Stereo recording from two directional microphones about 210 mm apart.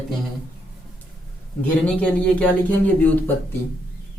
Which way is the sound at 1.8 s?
5° left (ahead or behind).